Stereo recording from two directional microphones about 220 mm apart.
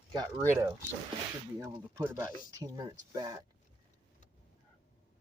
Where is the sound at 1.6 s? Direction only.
10° right (ahead or behind).